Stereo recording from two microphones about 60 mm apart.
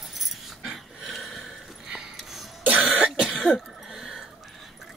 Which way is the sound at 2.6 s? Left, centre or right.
Right.